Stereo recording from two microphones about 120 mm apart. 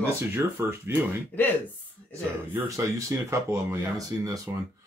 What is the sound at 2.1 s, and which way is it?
Speech, 25° right (ahead or behind).